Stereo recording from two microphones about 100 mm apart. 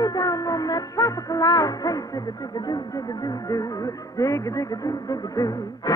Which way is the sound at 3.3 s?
35° left (ahead or behind).